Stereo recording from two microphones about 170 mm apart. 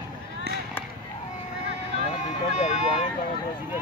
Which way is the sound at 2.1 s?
45° left (ahead or behind).